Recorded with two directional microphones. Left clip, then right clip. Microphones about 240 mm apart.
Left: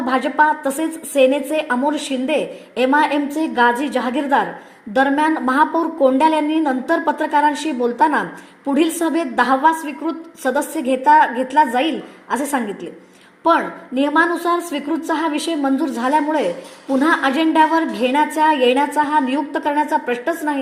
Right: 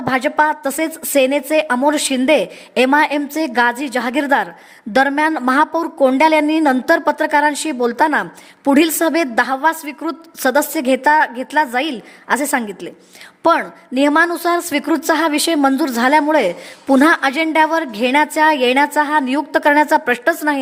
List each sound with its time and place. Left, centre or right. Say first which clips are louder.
0.1 s a woman's voice: right 1 dB; right